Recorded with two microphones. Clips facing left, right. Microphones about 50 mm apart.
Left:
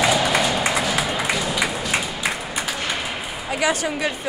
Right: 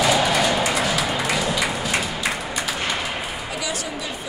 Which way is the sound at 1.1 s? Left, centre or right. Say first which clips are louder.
Right 1 dB; centre.